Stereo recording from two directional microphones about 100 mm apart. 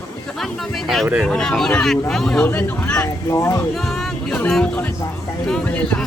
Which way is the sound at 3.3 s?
30° left (ahead or behind).